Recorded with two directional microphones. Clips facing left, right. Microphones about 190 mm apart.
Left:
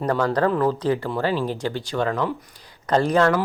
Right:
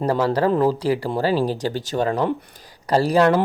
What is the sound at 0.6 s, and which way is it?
Speech, 10° right (ahead or behind).